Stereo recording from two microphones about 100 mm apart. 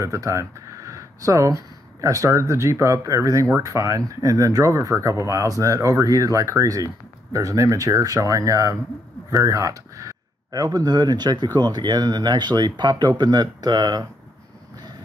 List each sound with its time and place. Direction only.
0.0 s speech: 30° right (ahead or behind)